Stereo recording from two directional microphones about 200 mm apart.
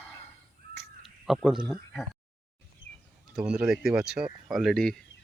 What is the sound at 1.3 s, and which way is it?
Speech, centre (ahead or behind).